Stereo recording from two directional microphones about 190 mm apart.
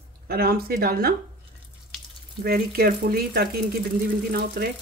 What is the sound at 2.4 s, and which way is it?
Speech, 55° right (ahead or behind).